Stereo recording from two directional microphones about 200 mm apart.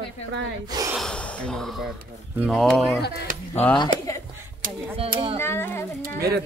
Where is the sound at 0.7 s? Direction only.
20° right (ahead or behind).